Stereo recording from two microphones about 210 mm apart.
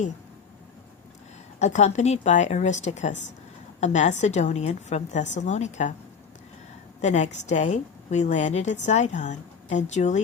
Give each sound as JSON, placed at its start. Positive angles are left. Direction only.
{"t": 1.5, "sound": "a woman's voice", "side_deg": 35}
{"t": 7.0, "sound": "a woman's voice", "side_deg": 35}